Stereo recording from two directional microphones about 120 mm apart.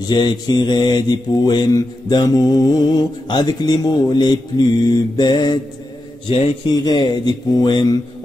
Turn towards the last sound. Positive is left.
turn(degrees=35)  # may be behind; listen again after turning